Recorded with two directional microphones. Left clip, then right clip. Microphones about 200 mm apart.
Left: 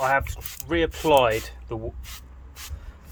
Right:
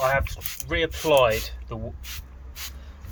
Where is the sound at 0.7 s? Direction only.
50° left (ahead or behind).